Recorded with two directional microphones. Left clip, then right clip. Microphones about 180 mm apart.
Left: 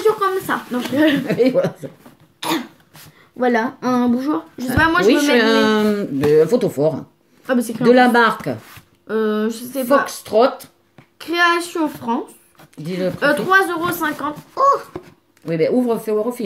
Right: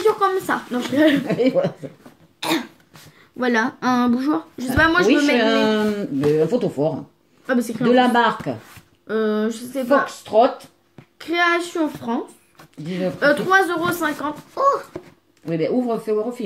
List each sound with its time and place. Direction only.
0.0 s speech: 5° left (ahead or behind)
1.2 s speech: 55° left (ahead or behind)
2.4 s cough: centre (ahead or behind)
3.3 s a child's voice: 5° right (ahead or behind)
5.3 s speech: 50° left (ahead or behind)
7.4 s a child's voice: 10° left (ahead or behind)
7.9 s speech: 55° left (ahead or behind)
9.0 s a child's voice: 5° left (ahead or behind)
10.0 s speech: 50° left (ahead or behind)
11.1 s a child's voice: 10° left (ahead or behind)
12.8 s speech: 55° left (ahead or behind)
13.2 s speech: 5° left (ahead or behind)
15.4 s speech: 55° left (ahead or behind)